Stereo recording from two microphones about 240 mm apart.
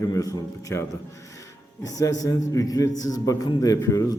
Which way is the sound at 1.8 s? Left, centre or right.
Centre.